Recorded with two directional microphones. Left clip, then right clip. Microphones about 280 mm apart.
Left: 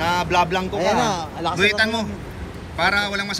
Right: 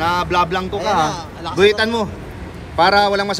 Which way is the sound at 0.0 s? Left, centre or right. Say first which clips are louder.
Right 2 dB; centre.